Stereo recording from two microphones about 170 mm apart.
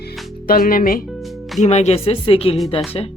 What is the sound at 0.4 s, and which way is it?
Speech, 55° left (ahead or behind).